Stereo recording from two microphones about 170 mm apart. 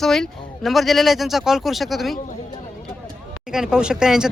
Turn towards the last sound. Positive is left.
turn(degrees=-5)  # may be behind; listen again after turning